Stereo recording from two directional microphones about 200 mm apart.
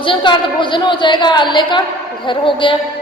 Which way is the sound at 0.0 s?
25° left (ahead or behind).